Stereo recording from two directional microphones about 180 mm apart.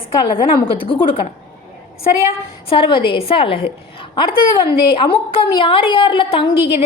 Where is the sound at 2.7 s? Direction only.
30° left (ahead or behind).